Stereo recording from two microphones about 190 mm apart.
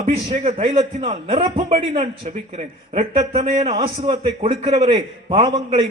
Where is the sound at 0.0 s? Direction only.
35° right (ahead or behind).